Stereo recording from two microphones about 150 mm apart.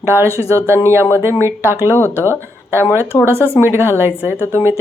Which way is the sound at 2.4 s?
15° right (ahead or behind).